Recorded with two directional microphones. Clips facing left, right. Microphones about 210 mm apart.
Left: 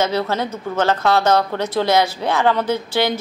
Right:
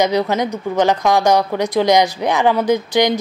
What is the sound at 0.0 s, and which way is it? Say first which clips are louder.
Speech: right 4 dB; 15° right (ahead or behind).